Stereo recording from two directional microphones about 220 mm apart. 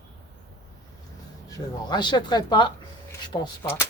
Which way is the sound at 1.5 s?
20° left (ahead or behind).